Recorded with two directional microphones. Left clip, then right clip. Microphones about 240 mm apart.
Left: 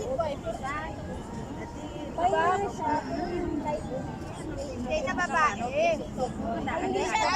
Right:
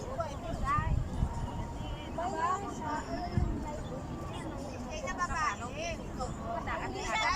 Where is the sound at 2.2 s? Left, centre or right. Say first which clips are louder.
Left 8 dB; left.